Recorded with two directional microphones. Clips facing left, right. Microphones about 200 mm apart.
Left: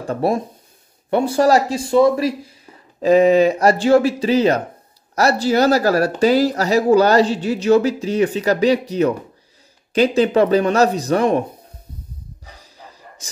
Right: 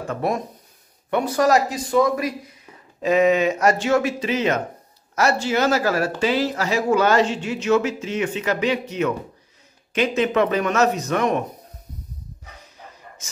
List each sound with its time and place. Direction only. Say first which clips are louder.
0.0 s speech: left 5 dB; 30° left (ahead or behind)
12.4 s bow-wow: left 1 dB; 35° left (ahead or behind)
13.2 s speech: left 6 dB; 35° left (ahead or behind)